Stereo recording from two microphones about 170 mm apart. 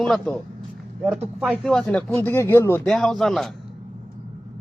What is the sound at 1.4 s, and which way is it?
Speech, centre (ahead or behind).